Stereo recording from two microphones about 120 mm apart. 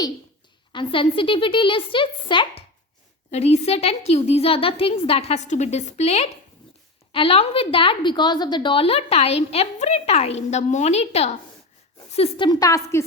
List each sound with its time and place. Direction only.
0.7 s a woman's voice: 45° left (ahead or behind)
3.3 s a woman's voice: 65° left (ahead or behind)
7.1 s a woman's voice: 50° left (ahead or behind); by 11.3 s 65° left (ahead or behind)
12.4 s a woman's voice: 35° left (ahead or behind)